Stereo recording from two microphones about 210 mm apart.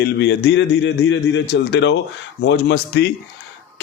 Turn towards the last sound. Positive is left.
turn(degrees=55)  # may be behind; listen again after turning